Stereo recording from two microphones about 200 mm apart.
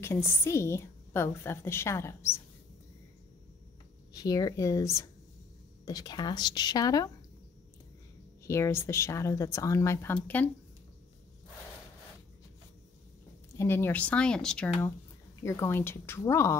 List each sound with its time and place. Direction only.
0.0 s a woman's voice: 10° left (ahead or behind)
4.1 s a woman's voice: 20° left (ahead or behind)
8.5 s a woman's voice: 15° left (ahead or behind)
13.6 s a woman's voice: 10° left (ahead or behind)